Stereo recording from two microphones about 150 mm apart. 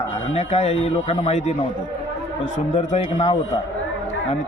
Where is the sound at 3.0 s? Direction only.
35° left (ahead or behind).